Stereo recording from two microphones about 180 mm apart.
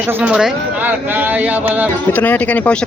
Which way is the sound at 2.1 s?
10° left (ahead or behind).